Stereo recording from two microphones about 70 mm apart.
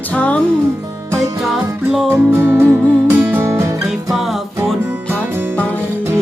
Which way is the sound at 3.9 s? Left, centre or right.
Centre.